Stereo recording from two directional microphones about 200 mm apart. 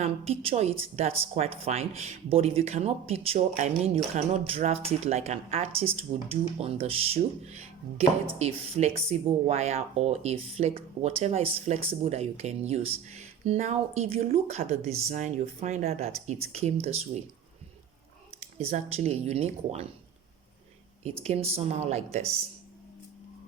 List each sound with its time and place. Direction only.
0.0 s speech: 30° right (ahead or behind)
18.3 s speech: 35° right (ahead or behind)
21.0 s speech: 30° right (ahead or behind)